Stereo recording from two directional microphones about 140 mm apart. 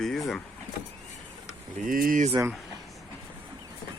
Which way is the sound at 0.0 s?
Centre (ahead or behind).